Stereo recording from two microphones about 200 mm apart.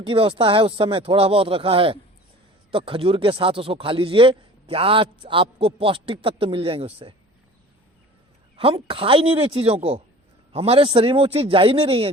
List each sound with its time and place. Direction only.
0.0 s a man's voice: 25° right (ahead or behind)
8.5 s a man's voice: 25° right (ahead or behind)